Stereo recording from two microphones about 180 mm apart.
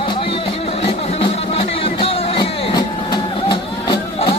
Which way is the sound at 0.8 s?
30° left (ahead or behind).